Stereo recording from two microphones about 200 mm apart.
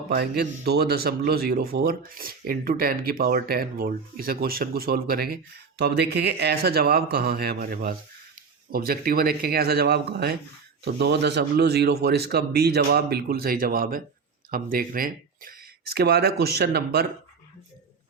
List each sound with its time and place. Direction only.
0.1 s speech: 55° right (ahead or behind)